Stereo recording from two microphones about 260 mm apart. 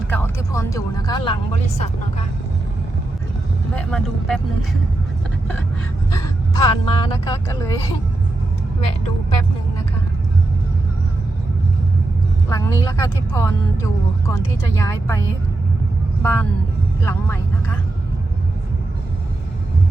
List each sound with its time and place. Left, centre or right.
0.1 s speech: centre; by 2.2 s left
3.8 s speech: centre
6.1 s speech: centre
12.5 s speech: centre
16.2 s speech: centre